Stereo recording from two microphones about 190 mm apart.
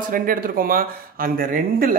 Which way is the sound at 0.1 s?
50° right (ahead or behind).